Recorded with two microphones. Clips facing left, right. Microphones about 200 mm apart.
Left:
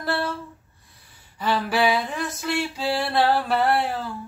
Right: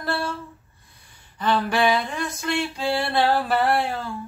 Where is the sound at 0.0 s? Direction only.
Centre (ahead or behind).